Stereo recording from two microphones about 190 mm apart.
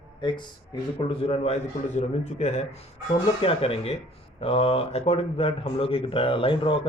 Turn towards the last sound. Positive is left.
turn(degrees=25)  # may be behind; listen again after turning